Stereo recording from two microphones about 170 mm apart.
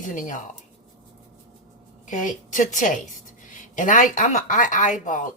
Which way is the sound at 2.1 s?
50° left (ahead or behind).